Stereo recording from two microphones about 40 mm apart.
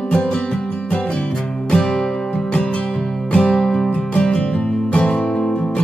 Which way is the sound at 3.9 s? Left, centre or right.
Left.